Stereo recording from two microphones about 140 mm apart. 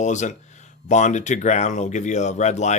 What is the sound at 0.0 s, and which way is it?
Speech, 60° left (ahead or behind).